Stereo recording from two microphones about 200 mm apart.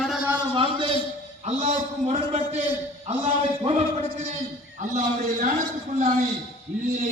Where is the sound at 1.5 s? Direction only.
35° right (ahead or behind).